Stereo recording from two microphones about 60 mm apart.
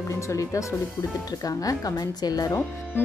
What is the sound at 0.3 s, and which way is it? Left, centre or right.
Speech, left.